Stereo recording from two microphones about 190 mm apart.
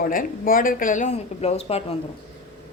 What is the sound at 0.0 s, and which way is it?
Speech, 45° left (ahead or behind).